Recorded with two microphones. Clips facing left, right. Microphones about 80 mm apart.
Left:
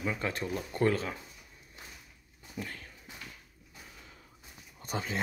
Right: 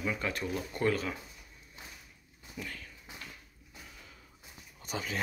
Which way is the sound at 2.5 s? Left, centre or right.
Left.